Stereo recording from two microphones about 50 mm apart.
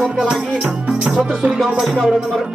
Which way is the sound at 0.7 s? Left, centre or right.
Right.